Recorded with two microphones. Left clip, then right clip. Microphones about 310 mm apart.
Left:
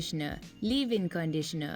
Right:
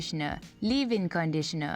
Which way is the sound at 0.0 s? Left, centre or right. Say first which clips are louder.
Right 3 dB; centre.